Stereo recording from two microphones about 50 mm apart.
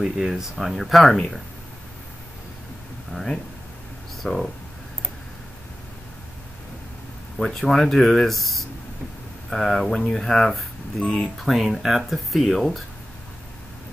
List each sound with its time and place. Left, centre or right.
0.0 s speech: centre
3.1 s speech: centre
7.3 s speech: centre
11.0 s speech: left
11.3 s speech: centre